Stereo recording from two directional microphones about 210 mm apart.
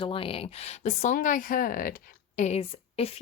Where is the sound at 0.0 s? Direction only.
25° left (ahead or behind).